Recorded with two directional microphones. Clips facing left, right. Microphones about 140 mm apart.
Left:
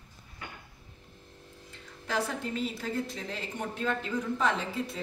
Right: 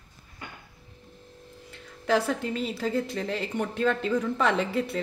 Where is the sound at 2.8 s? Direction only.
80° right.